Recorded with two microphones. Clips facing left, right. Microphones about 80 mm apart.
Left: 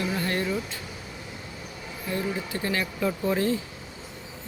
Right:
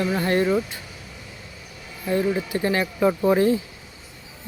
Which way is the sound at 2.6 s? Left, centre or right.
Right.